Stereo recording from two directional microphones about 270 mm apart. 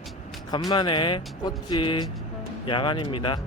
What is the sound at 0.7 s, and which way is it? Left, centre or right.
Speech, centre.